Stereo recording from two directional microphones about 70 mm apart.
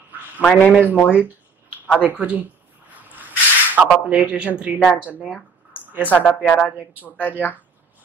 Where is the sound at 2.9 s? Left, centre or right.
Right.